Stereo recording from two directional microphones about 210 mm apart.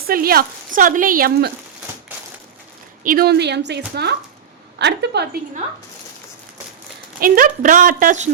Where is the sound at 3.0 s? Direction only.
45° right (ahead or behind).